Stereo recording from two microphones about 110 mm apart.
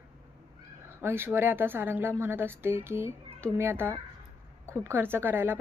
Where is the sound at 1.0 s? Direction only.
20° right (ahead or behind).